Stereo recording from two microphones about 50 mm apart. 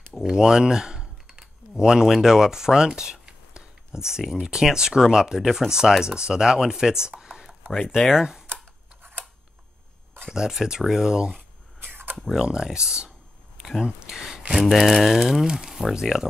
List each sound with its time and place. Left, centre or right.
0.1 s typing: centre
1.8 s speech: centre
10.3 s speech: centre
11.9 s a sound: right
12.3 s speech: centre
13.6 s a sound: centre
13.8 s speech: centre
14.5 s speech: centre